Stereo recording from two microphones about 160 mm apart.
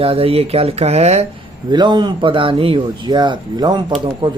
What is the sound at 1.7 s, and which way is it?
Speech, 25° right (ahead or behind).